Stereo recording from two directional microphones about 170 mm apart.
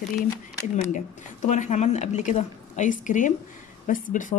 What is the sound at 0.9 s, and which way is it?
Speech, 45° left (ahead or behind).